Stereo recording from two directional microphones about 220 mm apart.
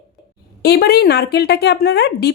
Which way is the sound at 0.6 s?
45° left (ahead or behind).